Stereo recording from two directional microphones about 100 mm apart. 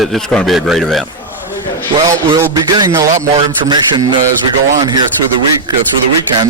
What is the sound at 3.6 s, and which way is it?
Speech, 50° right (ahead or behind).